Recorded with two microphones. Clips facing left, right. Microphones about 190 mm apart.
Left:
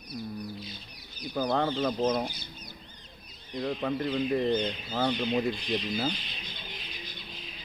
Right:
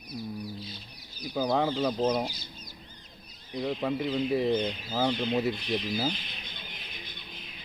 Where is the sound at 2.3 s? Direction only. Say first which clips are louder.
Left 1 dB; 60° left (ahead or behind).